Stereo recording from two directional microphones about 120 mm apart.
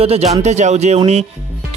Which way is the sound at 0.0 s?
55° right (ahead or behind).